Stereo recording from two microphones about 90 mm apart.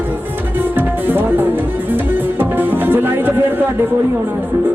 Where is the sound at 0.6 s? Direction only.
20° right (ahead or behind).